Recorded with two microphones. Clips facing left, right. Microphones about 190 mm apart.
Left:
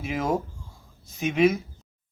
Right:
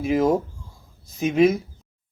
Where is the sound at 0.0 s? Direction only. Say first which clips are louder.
Right 7 dB; 40° right (ahead or behind).